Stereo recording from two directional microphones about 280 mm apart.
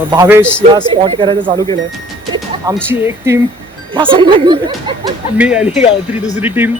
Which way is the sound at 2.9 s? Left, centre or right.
Centre.